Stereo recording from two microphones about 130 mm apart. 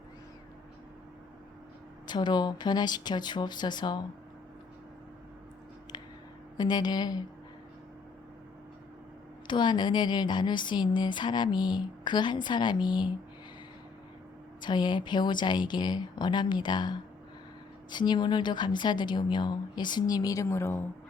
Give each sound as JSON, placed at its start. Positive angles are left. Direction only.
{"t": 2.0, "sound": "speech", "side_deg": 35}
{"t": 6.6, "sound": "speech", "side_deg": 30}
{"t": 9.5, "sound": "speech", "side_deg": 35}
{"t": 14.6, "sound": "speech", "side_deg": 35}